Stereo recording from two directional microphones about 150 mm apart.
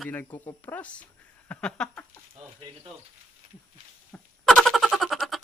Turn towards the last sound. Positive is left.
turn(degrees=0)  # may be behind; listen again after turning